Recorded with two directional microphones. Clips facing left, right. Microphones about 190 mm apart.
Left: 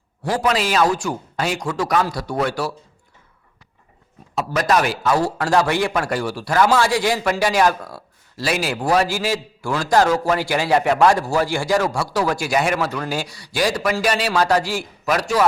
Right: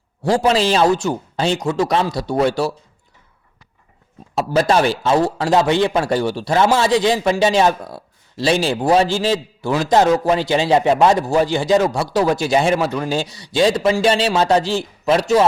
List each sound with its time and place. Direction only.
0.2 s a man's voice: 25° right (ahead or behind)
4.4 s a man's voice: 30° right (ahead or behind)